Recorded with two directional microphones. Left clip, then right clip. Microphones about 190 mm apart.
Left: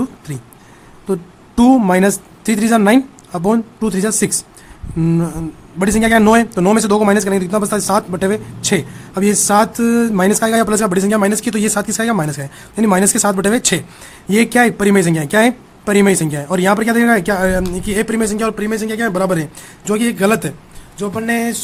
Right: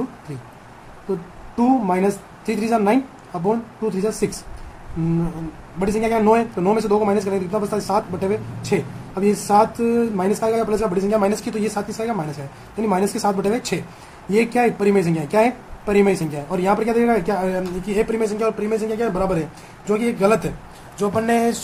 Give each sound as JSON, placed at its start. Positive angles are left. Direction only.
{"t": 1.5, "sound": "speech", "side_deg": 50}
{"t": 5.8, "sound": "speech", "side_deg": 45}
{"t": 21.0, "sound": "speech", "side_deg": 25}